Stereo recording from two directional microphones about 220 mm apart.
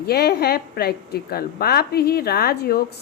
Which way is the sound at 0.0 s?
45° left (ahead or behind).